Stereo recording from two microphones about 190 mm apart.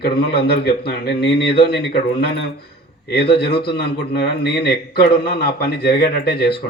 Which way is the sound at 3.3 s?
60° left (ahead or behind).